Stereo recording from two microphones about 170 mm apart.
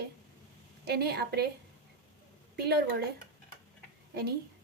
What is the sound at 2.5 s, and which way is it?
Speech, 70° right (ahead or behind).